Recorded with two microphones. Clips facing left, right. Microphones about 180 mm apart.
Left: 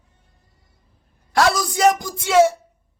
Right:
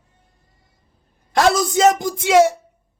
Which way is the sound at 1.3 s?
20° right (ahead or behind).